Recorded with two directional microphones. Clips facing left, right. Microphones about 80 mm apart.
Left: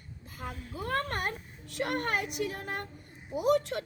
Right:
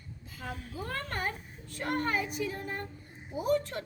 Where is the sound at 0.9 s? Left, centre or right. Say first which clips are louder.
Left 4 dB; left.